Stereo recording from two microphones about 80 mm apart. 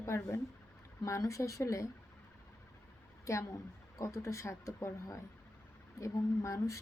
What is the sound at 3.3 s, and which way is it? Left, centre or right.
Speech, left.